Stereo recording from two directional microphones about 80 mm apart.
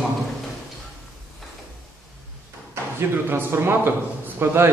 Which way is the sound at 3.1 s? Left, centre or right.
Right.